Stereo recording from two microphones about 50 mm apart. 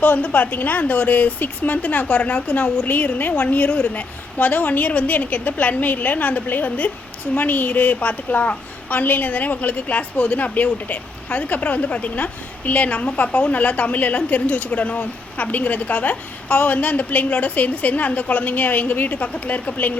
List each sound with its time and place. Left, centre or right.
0.0 s a woman's voice: left